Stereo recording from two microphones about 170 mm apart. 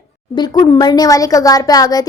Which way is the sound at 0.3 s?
25° left (ahead or behind).